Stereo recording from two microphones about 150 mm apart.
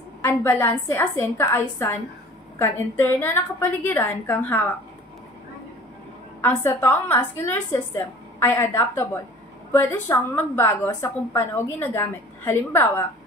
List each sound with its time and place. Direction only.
0.3 s a woman's voice: 15° left (ahead or behind)
6.4 s a woman's voice: 15° left (ahead or behind)